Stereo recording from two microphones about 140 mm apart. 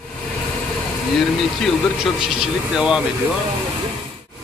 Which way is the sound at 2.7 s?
5° right (ahead or behind).